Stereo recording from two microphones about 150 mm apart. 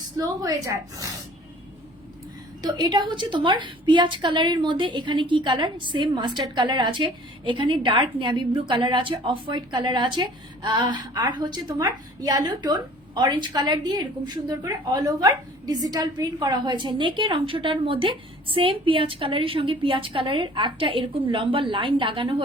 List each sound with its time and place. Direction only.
0.2 s speech: 25° right (ahead or behind)
2.6 s a woman's voice: 25° right (ahead or behind)